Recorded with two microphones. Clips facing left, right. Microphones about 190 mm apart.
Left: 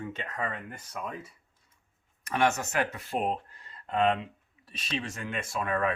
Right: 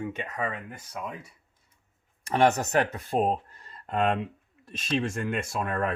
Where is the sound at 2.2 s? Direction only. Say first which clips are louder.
Right 4 dB; 35° right (ahead or behind); by 5.0 s 50° right (ahead or behind).